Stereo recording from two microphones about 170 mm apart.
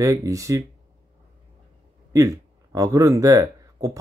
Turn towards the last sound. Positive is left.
turn(degrees=-20)  # may be behind; listen again after turning